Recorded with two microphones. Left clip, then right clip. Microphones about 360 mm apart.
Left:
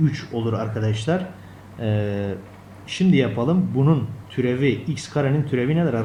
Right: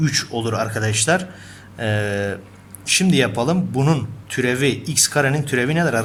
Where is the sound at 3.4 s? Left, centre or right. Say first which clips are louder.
Right 2 dB; right.